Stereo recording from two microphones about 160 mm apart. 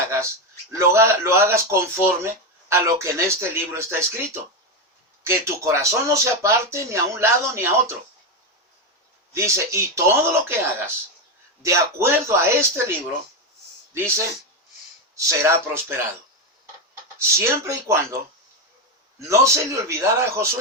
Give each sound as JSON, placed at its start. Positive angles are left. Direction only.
{"t": 0.0, "sound": "a sound", "side_deg": -15}
{"t": 0.7, "sound": "speech", "side_deg": -15}
{"t": 9.3, "sound": "speech", "side_deg": -15}
{"t": 17.3, "sound": "speech", "side_deg": -15}
{"t": 19.3, "sound": "speech", "side_deg": -20}